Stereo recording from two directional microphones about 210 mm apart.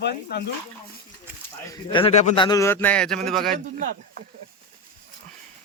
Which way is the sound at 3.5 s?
40° right (ahead or behind).